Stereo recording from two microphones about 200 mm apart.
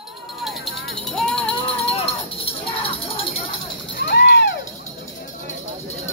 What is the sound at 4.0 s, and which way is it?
Music, 55° left (ahead or behind).